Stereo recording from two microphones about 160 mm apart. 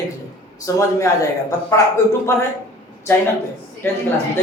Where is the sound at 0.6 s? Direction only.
20° left (ahead or behind).